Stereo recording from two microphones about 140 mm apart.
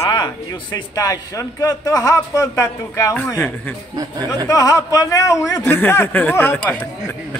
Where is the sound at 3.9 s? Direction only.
25° right (ahead or behind).